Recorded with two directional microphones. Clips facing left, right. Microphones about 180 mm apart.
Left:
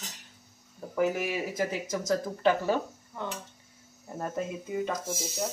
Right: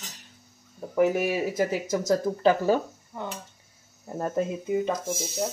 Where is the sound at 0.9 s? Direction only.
25° right (ahead or behind).